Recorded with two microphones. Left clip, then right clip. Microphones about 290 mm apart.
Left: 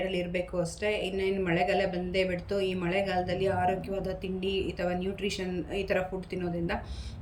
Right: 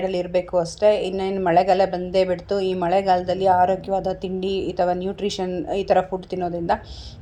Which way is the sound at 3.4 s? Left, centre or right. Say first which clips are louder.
Right 14 dB; right.